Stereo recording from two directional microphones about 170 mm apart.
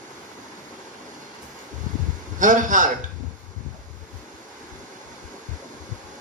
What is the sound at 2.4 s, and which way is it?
Speech, 50° right (ahead or behind).